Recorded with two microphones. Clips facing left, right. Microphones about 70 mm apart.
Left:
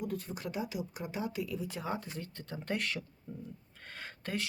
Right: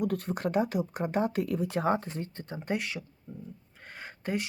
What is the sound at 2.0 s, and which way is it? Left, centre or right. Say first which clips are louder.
Speech: right 5 dB; right.